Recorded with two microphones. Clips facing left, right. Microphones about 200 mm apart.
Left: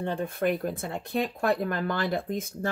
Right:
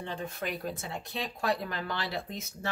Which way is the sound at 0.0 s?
55° left (ahead or behind).